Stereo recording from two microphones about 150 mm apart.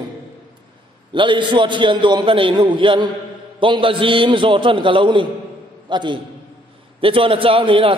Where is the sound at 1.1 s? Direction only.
35° right (ahead or behind).